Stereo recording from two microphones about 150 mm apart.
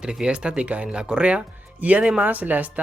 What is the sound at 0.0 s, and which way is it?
Speech, 5° right (ahead or behind).